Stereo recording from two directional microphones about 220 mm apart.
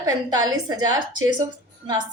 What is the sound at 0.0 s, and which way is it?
A woman's voice, 15° right (ahead or behind).